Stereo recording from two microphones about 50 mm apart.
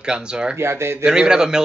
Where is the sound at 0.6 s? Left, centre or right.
Right.